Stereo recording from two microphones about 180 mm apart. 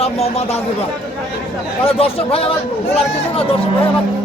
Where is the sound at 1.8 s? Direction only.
35° left (ahead or behind).